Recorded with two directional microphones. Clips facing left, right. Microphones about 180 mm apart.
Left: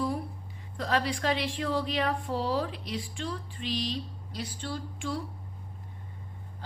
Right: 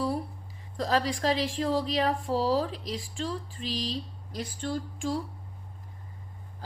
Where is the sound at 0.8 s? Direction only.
35° right (ahead or behind).